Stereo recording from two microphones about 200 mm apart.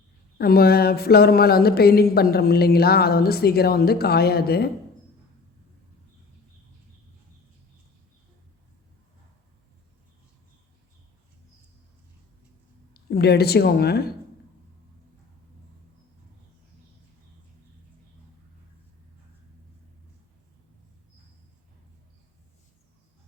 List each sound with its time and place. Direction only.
0.3 s speech: 50° left (ahead or behind)
12.9 s a woman's voice: 50° left (ahead or behind)